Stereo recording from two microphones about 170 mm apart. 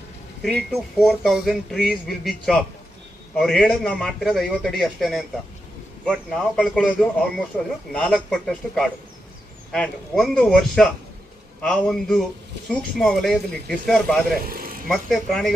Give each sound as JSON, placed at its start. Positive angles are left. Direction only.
{"t": 0.4, "sound": "speech", "side_deg": 0}
{"t": 14.3, "sound": "speech", "side_deg": -60}
{"t": 14.9, "sound": "speech", "side_deg": 0}